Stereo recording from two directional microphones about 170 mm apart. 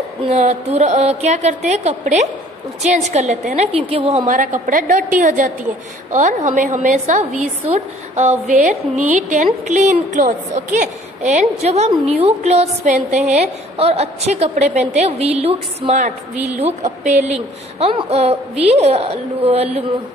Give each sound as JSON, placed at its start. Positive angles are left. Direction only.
{"t": 0.3, "sound": "a woman's voice", "side_deg": -40}